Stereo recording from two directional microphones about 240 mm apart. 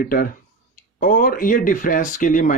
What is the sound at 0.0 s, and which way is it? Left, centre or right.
Speech, left.